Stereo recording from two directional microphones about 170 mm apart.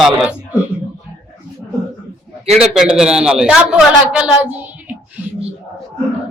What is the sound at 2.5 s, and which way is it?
Speech, 40° right (ahead or behind).